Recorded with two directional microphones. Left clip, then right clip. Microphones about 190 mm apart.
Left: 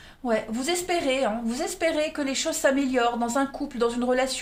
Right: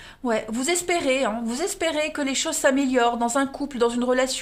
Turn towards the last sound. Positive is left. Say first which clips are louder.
# right 2 dB
turn(degrees=-40)  # may be behind; listen again after turning